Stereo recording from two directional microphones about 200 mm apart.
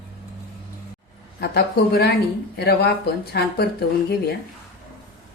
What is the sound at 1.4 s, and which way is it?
Speech, 50° left (ahead or behind).